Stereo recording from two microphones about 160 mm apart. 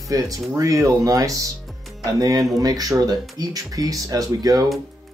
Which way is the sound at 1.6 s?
Centre (ahead or behind).